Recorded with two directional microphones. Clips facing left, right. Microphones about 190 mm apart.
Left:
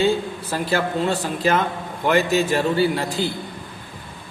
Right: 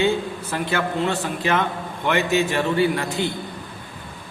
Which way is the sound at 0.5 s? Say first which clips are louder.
Left 2 dB; 35° left (ahead or behind).